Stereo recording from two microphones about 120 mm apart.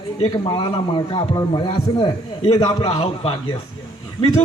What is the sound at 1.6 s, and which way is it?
A man's voice, 50° left (ahead or behind).